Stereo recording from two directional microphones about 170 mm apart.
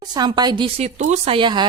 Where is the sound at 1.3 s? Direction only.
25° right (ahead or behind).